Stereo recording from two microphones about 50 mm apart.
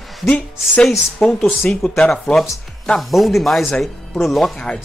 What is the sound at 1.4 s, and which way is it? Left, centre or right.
Speech, centre.